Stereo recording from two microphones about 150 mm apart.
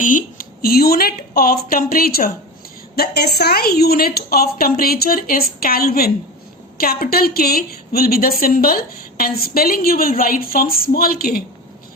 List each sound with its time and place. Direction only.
0.0 s a woman's voice: 60° left (ahead or behind); by 11.4 s 85° left